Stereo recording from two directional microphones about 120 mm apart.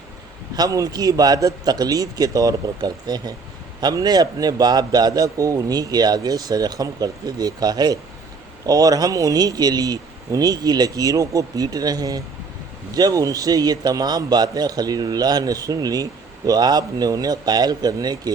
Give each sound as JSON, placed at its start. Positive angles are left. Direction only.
{"t": 0.5, "sound": "a man's voice", "side_deg": -30}